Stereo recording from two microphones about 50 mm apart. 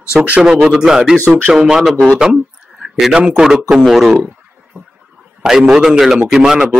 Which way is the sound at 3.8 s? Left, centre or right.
Centre.